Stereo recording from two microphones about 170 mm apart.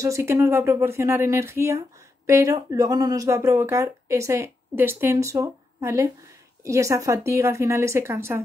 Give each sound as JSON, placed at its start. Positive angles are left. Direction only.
{"t": 0.0, "sound": "speech", "side_deg": -15}